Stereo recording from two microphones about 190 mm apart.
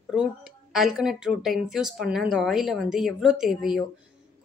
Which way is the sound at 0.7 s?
Centre (ahead or behind).